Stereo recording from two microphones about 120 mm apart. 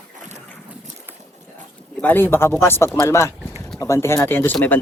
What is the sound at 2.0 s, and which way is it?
A man's voice, 15° left (ahead or behind).